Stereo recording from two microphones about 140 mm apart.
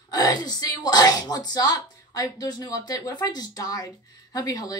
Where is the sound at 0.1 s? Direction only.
25° left (ahead or behind).